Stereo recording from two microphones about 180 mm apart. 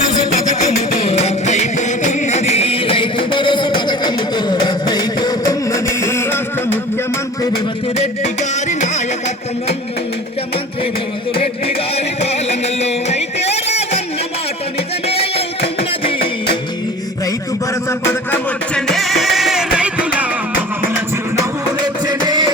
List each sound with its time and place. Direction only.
0.6 s music: 40° left (ahead or behind); by 6.7 s 15° left (ahead or behind)
7.9 s music: 40° left (ahead or behind)
11.3 s music: 35° left (ahead or behind)
15.0 s music: 35° left (ahead or behind)
17.8 s music: 10° left (ahead or behind); by 20.2 s 5° right (ahead or behind)
22.0 s music: 25° right (ahead or behind)